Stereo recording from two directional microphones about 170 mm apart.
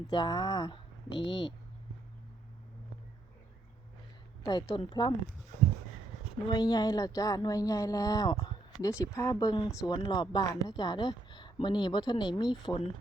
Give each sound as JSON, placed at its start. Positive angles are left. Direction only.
{"t": 0.1, "sound": "speech", "side_deg": 25}
{"t": 4.4, "sound": "speech", "side_deg": 25}
{"t": 6.5, "sound": "speech", "side_deg": 25}